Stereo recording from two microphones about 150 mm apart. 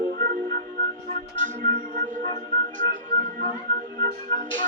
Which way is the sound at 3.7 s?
60° right (ahead or behind).